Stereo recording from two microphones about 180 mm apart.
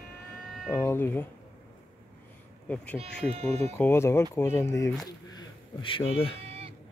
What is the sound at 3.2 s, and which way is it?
Speech, 35° right (ahead or behind).